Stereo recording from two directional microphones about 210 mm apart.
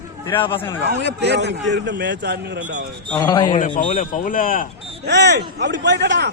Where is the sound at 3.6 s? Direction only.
35° left (ahead or behind).